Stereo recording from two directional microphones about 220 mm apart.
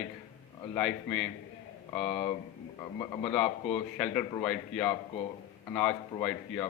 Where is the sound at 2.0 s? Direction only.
30° left (ahead or behind).